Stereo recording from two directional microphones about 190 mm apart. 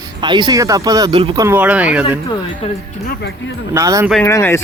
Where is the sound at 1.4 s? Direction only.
10° right (ahead or behind).